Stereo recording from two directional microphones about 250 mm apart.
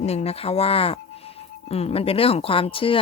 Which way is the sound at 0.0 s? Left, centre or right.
Left.